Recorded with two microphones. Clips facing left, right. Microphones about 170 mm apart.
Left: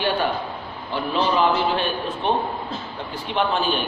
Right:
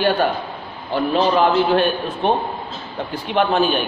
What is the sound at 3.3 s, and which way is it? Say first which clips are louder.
Speech: right 5 dB; 55° right (ahead or behind).